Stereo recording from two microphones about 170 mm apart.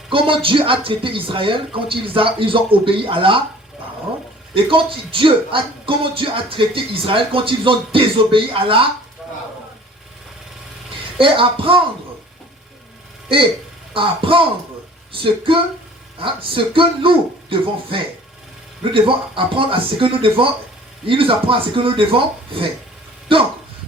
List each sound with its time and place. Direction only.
0.1 s speech: 30° right (ahead or behind)
4.5 s speech: 30° right (ahead or behind)
11.2 s speech: 30° right (ahead or behind)
13.2 s speech: 30° right (ahead or behind)
19.0 s speech: 30° right (ahead or behind)